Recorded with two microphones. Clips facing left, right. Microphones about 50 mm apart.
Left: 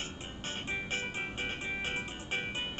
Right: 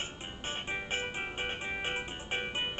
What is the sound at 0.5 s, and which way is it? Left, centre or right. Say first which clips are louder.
Music: right 1 dB; right.